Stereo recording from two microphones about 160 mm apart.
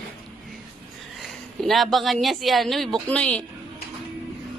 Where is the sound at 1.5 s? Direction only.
Centre (ahead or behind).